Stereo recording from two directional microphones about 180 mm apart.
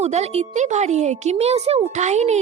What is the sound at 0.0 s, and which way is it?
Speech, 35° right (ahead or behind).